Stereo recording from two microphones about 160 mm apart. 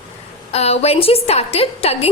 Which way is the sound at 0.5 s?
40° left (ahead or behind).